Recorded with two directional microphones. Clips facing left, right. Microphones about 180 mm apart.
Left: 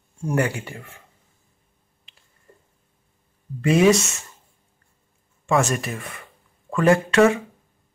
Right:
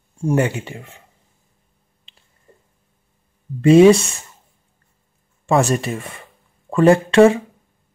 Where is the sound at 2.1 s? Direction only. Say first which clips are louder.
Right 2 dB; 25° right (ahead or behind).